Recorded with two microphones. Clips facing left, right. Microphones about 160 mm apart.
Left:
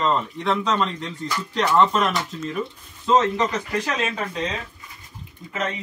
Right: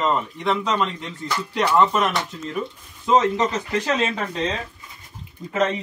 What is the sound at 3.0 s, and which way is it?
Speech, 20° right (ahead or behind).